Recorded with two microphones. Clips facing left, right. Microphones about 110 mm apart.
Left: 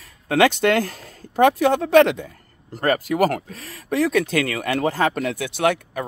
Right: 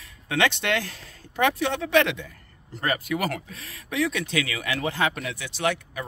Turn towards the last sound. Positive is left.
turn(degrees=50)  # may be behind; listen again after turning